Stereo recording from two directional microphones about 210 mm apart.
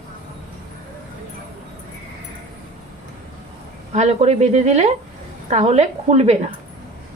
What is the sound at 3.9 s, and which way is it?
A woman's voice, 35° right (ahead or behind).